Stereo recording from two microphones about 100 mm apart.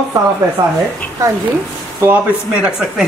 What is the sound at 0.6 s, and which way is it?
Speech, 50° right (ahead or behind).